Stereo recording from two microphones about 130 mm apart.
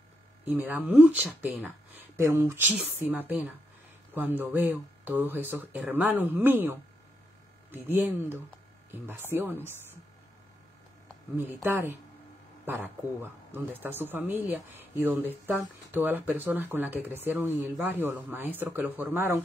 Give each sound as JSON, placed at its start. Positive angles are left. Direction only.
{"t": 0.5, "sound": "speech", "side_deg": -15}
{"t": 11.3, "sound": "speech", "side_deg": -15}